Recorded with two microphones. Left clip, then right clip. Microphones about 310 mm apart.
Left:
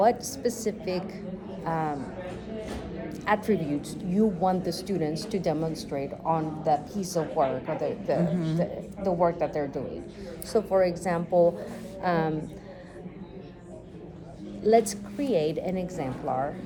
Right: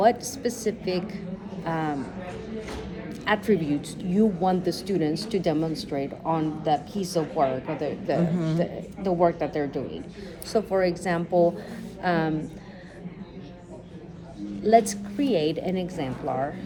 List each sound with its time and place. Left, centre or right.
0.0 s a woman's voice: centre
3.2 s a woman's voice: centre
14.6 s a woman's voice: left